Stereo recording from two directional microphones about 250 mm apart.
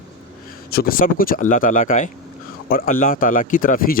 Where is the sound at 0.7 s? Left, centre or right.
Left.